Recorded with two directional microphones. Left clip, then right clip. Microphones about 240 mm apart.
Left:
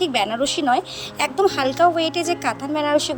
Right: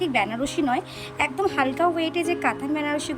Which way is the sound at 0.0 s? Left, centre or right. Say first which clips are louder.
Left 4 dB; left.